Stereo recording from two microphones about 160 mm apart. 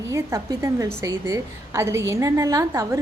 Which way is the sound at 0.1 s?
15° right (ahead or behind).